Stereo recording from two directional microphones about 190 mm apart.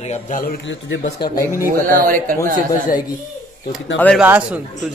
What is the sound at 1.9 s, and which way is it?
Speech, 45° right (ahead or behind).